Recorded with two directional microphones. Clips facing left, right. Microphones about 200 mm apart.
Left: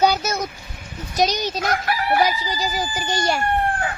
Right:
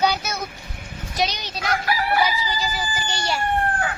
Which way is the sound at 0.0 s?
45° left (ahead or behind).